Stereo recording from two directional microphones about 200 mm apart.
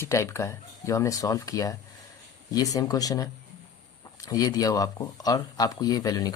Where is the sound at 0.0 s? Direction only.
15° left (ahead or behind).